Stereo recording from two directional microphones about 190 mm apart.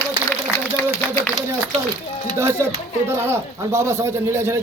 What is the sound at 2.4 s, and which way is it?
A man's voice, 15° right (ahead or behind).